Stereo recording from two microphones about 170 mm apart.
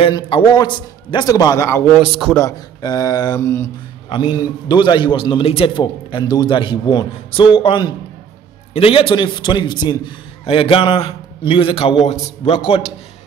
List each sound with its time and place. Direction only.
0.0 s a man's voice: 30° left (ahead or behind); by 1.9 s 15° left (ahead or behind)
2.0 s a man's voice: 5° right (ahead or behind)
2.3 s a man's voice: 20° left (ahead or behind)
4.1 s a man's voice: 30° left (ahead or behind)